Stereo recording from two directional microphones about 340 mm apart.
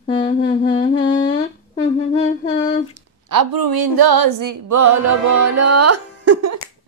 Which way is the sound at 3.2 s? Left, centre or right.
Right.